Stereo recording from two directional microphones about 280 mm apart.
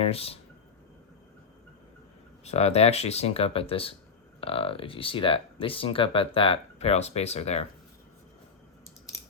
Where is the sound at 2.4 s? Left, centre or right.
Left.